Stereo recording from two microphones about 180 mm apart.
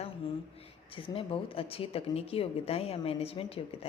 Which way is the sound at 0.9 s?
30° left (ahead or behind).